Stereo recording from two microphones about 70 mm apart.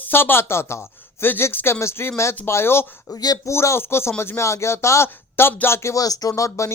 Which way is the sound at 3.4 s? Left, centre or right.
Left.